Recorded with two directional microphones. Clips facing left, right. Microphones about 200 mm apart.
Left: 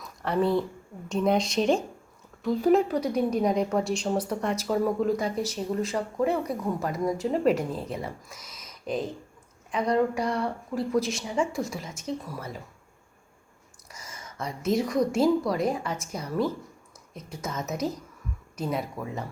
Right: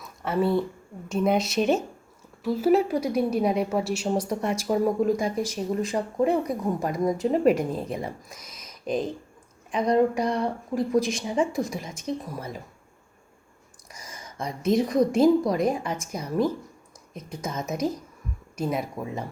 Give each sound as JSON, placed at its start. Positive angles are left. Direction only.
{"t": 0.0, "sound": "a sound", "side_deg": 0}
{"t": 1.0, "sound": "a woman's voice", "side_deg": -5}
{"t": 13.9, "sound": "a woman's voice", "side_deg": -15}